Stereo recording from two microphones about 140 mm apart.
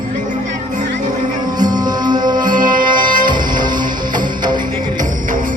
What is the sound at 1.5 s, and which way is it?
Music, 30° right (ahead or behind).